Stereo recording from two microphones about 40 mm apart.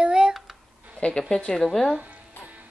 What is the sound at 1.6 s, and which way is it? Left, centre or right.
Speech, centre.